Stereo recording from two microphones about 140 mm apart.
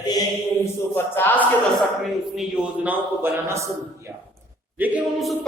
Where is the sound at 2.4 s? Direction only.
10° right (ahead or behind).